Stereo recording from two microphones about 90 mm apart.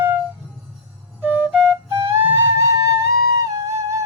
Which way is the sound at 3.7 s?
35° right (ahead or behind).